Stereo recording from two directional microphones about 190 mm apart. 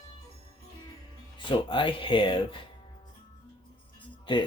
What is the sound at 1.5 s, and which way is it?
Speech, 25° left (ahead or behind).